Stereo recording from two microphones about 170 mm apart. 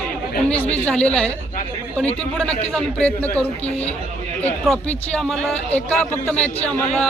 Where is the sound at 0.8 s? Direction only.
5° left (ahead or behind).